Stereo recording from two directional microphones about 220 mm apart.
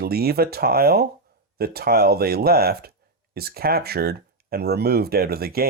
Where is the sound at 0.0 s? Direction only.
45° right (ahead or behind).